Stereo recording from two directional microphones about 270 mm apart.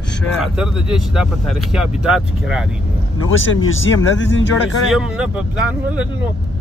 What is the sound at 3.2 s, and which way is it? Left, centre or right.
Speech, left.